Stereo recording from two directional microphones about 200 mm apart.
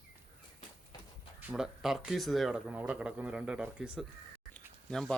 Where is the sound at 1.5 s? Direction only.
5° right (ahead or behind).